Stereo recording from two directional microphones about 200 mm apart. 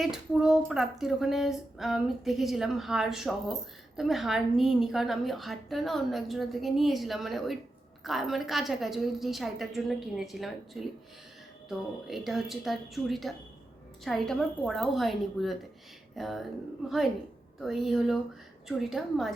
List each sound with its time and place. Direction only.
0.0 s a woman's voice: centre (ahead or behind)
17.6 s a woman's voice: centre (ahead or behind)